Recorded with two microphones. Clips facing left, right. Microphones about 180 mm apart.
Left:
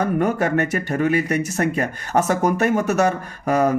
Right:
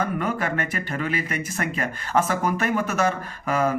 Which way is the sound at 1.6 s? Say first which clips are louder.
Left 6 dB; 45° left (ahead or behind).